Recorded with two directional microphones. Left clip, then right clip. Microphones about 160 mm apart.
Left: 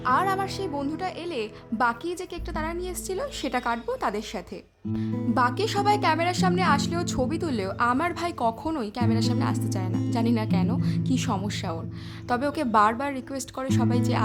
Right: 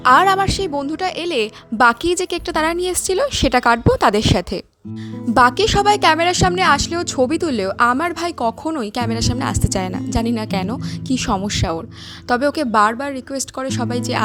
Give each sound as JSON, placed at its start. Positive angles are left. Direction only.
{"t": 0.0, "sound": "a woman's voice", "side_deg": -45}